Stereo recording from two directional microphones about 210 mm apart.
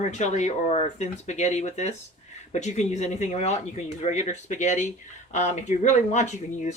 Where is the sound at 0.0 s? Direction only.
35° left (ahead or behind).